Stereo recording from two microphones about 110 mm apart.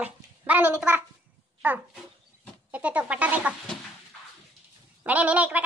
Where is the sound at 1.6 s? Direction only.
15° right (ahead or behind).